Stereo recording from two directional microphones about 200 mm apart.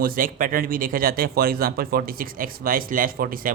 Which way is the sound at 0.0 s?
45° right (ahead or behind).